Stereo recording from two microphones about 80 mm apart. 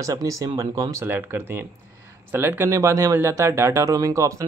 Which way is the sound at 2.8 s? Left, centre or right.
Right.